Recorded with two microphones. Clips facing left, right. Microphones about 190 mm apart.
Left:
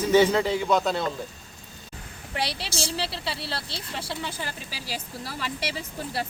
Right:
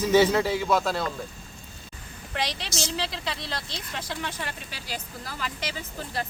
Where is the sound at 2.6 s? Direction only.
35° left (ahead or behind).